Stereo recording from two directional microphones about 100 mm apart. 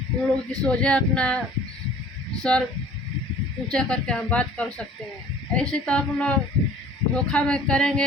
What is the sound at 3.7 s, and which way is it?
Speech, 10° left (ahead or behind).